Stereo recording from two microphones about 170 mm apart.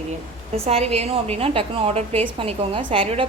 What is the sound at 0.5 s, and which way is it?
A woman's voice, 35° right (ahead or behind).